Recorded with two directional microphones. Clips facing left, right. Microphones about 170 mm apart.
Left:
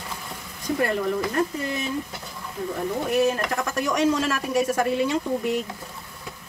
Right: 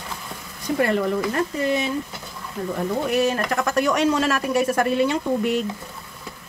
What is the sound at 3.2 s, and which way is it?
Speech, 80° right.